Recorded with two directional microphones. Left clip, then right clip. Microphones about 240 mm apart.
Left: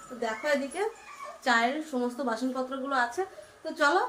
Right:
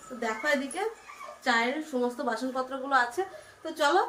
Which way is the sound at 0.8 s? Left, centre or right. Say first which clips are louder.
Left 1 dB; centre.